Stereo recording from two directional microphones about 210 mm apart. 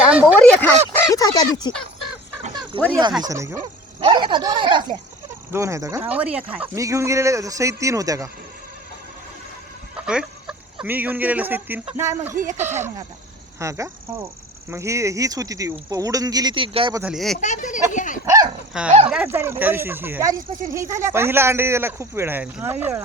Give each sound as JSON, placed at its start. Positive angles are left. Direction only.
{"t": 0.1, "sound": "speech", "side_deg": -10}
{"t": 0.3, "sound": "speech", "side_deg": 5}
{"t": 2.7, "sound": "speech", "side_deg": -25}
{"t": 9.9, "sound": "speech", "side_deg": -5}
{"t": 13.6, "sound": "speech", "side_deg": -15}
{"t": 17.0, "sound": "speech", "side_deg": 0}
{"t": 17.3, "sound": "speech", "side_deg": 35}
{"t": 17.9, "sound": "dog", "side_deg": 35}
{"t": 18.3, "sound": "dog", "side_deg": -15}
{"t": 18.7, "sound": "speech", "side_deg": -5}